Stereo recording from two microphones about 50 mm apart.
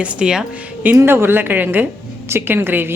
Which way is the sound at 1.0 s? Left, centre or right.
Right.